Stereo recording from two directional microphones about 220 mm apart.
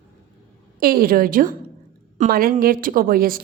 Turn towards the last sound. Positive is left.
turn(degrees=-40)  # may be behind; listen again after turning